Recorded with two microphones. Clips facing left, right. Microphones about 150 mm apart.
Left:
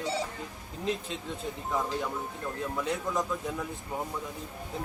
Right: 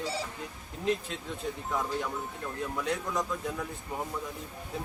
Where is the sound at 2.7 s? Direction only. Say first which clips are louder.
Left 1 dB; 5° left (ahead or behind).